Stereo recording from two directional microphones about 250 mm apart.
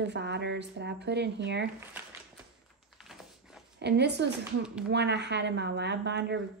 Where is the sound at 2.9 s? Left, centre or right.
Centre.